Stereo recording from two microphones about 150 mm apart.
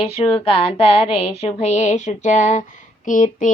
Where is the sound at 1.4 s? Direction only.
45° left (ahead or behind).